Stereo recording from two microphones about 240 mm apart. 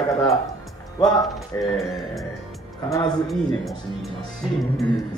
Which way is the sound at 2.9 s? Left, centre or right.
Centre.